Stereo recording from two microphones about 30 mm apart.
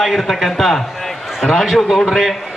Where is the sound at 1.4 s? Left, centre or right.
Centre.